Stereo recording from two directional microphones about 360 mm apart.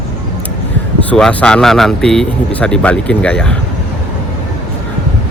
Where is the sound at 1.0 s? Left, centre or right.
Centre.